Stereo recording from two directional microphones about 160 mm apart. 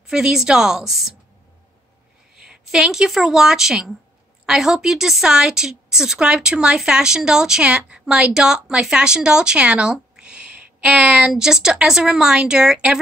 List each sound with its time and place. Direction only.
0.0 s a woman's voice: 5° right (ahead or behind)
2.3 s a woman's voice: 5° right (ahead or behind)